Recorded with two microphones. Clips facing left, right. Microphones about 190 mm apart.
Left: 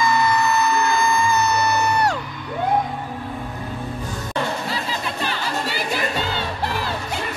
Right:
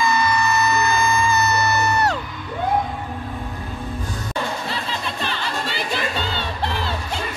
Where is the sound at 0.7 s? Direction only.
15° left (ahead or behind).